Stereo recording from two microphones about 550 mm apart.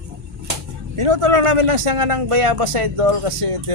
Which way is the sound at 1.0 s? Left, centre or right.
Right.